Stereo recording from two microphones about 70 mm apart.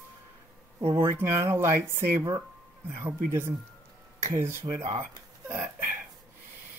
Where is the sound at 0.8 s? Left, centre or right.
Right.